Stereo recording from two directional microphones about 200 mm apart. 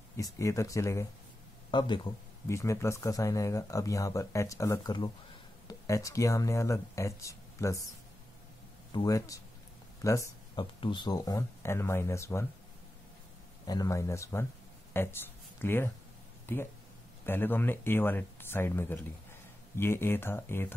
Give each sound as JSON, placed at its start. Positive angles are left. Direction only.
{"t": 0.2, "sound": "speech", "side_deg": 15}
{"t": 8.9, "sound": "speech", "side_deg": 15}
{"t": 13.7, "sound": "speech", "side_deg": 15}